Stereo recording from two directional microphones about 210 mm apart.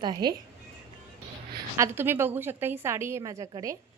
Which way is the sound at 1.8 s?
10° right (ahead or behind).